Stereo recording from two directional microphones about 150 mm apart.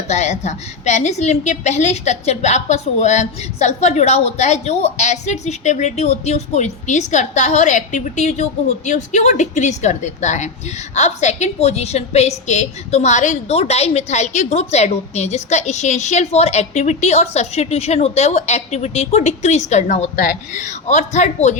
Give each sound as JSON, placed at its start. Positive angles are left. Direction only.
{"t": 0.1, "sound": "a woman's voice", "side_deg": 50}